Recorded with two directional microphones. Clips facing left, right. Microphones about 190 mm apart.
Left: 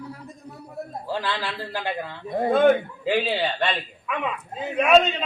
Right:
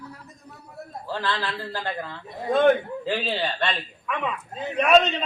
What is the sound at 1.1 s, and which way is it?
A man's voice, 15° left (ahead or behind).